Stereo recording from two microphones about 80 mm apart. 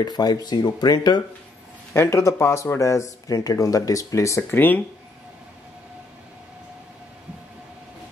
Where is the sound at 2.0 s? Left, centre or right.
Left.